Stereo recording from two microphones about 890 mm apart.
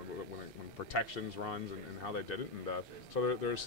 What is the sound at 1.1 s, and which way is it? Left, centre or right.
Speech, left.